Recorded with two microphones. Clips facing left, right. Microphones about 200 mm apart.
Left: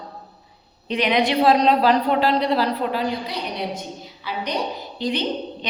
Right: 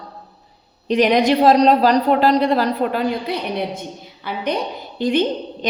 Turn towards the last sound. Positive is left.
turn(degrees=-50)  # may be behind; listen again after turning